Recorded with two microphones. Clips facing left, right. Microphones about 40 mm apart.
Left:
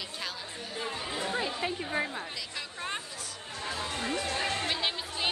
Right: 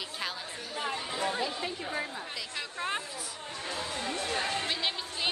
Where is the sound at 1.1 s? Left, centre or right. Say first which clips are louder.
Right 1 dB; centre.